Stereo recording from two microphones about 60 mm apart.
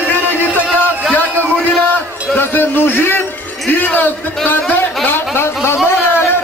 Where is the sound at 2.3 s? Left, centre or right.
Left.